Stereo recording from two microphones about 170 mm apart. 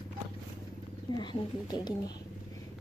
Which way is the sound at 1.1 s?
25° left (ahead or behind).